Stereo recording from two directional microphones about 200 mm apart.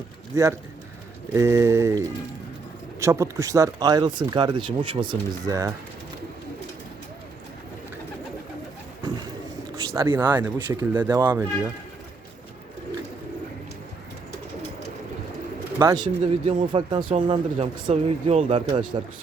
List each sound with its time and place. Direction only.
1.3 s speech: 15° right (ahead or behind)
9.9 s speech: 15° right (ahead or behind)
15.8 s speech: 15° right (ahead or behind)
16.2 s speech: 30° right (ahead or behind)